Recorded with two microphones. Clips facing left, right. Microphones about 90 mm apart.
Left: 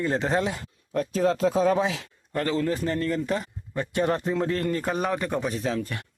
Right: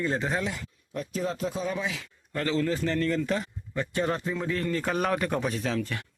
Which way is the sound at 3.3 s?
30° left (ahead or behind).